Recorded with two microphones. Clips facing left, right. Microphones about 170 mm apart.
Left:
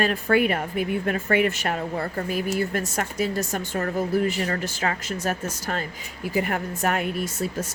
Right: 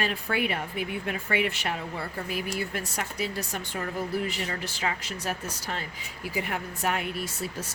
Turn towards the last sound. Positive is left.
turn(degrees=50)  # may be behind; listen again after turning